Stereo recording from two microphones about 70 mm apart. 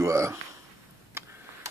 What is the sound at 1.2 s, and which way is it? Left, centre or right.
Tick-tock, right.